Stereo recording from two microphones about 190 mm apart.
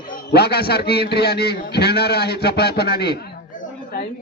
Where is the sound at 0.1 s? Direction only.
55° left (ahead or behind).